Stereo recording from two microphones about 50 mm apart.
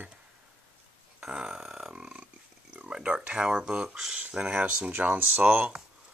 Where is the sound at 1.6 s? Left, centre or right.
Centre.